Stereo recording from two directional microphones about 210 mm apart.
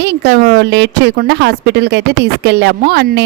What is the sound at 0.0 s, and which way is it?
A woman's voice, 55° right (ahead or behind).